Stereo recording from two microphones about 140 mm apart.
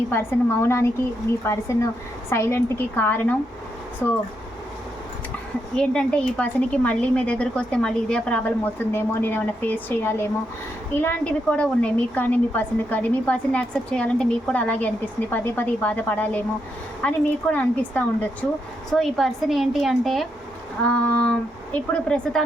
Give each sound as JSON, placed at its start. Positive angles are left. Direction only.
{"t": 0.1, "sound": "speech", "side_deg": 15}
{"t": 5.7, "sound": "speech", "side_deg": 5}
{"t": 18.9, "sound": "a woman's voice", "side_deg": 0}